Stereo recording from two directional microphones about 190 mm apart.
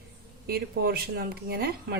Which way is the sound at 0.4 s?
55° right (ahead or behind).